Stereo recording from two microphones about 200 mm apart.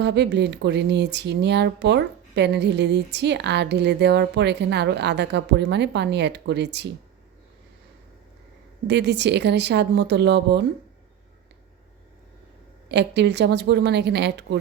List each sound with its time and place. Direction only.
0.0 s speech: 60° right (ahead or behind)
8.9 s speech: 60° right (ahead or behind)
12.9 s speech: 60° right (ahead or behind)